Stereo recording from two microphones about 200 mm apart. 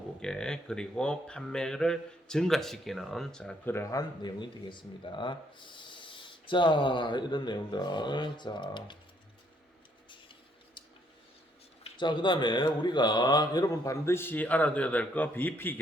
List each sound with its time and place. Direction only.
0.2 s speech: 5° left (ahead or behind); by 9.0 s 25° left (ahead or behind)
11.8 s speech: 25° left (ahead or behind)